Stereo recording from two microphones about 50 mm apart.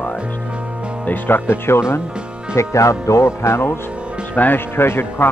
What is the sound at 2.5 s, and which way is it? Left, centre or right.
Speech, left.